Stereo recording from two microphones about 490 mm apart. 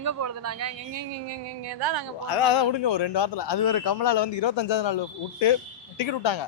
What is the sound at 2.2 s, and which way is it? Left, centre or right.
Speech, left.